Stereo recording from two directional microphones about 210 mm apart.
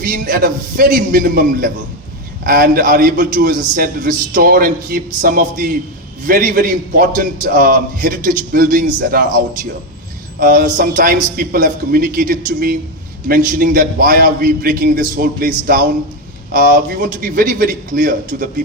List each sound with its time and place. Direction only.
0.0 s a man's voice: 40° right (ahead or behind)
10.4 s a man's voice: 40° right (ahead or behind)